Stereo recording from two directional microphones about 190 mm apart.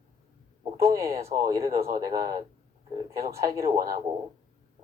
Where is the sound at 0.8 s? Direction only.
15° right (ahead or behind).